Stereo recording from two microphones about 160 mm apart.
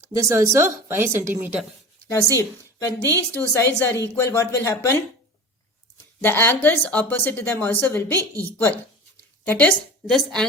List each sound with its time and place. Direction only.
0.0 s speech: 20° right (ahead or behind)
2.1 s a woman's voice: 20° left (ahead or behind)
6.2 s a woman's voice: 15° left (ahead or behind)